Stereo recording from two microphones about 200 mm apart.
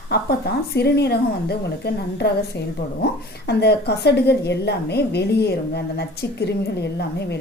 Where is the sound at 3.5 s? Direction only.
55° left (ahead or behind).